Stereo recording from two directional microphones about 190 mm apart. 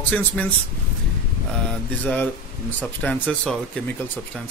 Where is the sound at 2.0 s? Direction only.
10° left (ahead or behind).